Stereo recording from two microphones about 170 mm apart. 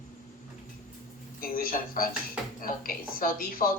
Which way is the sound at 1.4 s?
55° left (ahead or behind).